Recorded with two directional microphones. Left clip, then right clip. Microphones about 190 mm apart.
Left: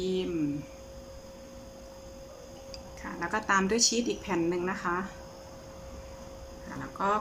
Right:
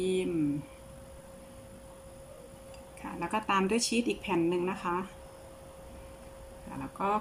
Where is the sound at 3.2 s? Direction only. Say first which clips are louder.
Left 2 dB; 15° right (ahead or behind).